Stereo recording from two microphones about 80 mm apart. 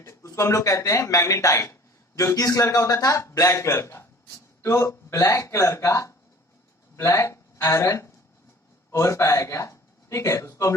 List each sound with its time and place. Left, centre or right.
0.0 s speech: left